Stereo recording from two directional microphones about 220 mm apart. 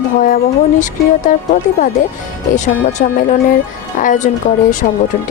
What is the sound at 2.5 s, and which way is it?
A woman's voice, 35° left (ahead or behind).